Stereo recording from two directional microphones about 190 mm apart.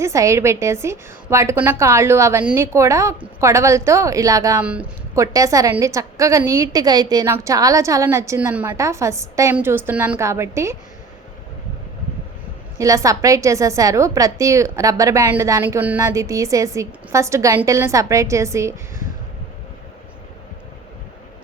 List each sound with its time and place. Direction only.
0.0 s a woman's voice: 15° right (ahead or behind)
4.6 s a woman's voice: 5° right (ahead or behind)
12.8 s a woman's voice: 15° right (ahead or behind)